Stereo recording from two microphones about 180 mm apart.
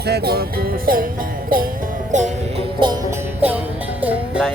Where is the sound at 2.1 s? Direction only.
40° right (ahead or behind).